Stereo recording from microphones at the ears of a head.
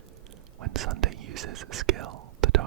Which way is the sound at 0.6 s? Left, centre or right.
Right.